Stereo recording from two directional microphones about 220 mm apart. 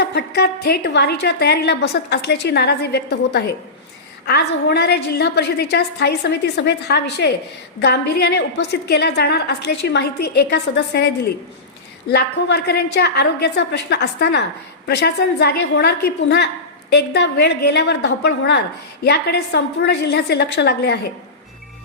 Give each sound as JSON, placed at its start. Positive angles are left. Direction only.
{"t": 0.0, "sound": "a woman's voice", "side_deg": 50}